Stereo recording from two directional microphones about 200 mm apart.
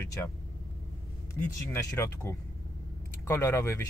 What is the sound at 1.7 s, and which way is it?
Speech, 15° left (ahead or behind).